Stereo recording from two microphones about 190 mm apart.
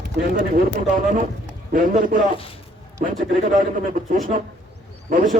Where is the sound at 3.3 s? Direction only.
45° right (ahead or behind).